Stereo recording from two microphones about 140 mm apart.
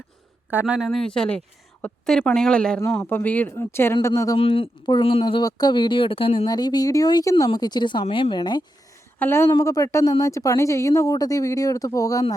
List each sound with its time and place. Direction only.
0.5 s speech: 5° right (ahead or behind); by 4.4 s 20° left (ahead or behind)
4.4 s speech: 40° left (ahead or behind)
9.1 s a woman's voice: 15° left (ahead or behind)